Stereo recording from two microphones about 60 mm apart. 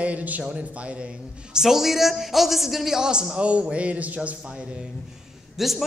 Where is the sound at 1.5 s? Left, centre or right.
Centre; by 4.4 s right.